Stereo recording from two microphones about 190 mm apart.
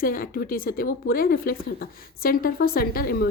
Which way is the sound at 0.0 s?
50° left (ahead or behind).